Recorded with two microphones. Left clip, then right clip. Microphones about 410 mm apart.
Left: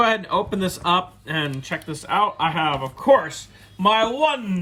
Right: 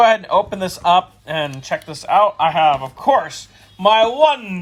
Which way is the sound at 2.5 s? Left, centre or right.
Centre.